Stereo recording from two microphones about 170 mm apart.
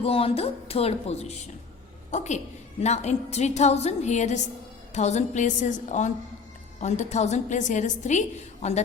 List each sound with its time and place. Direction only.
0.0 s a woman's voice: 35° left (ahead or behind)